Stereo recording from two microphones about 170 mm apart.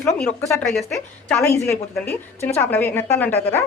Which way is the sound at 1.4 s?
15° left (ahead or behind).